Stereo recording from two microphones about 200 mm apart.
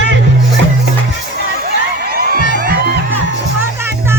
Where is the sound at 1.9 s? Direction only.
50° right (ahead or behind).